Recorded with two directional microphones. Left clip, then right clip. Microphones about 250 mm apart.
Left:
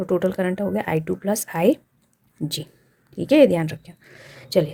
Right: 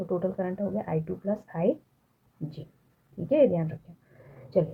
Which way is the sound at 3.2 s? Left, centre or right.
Left.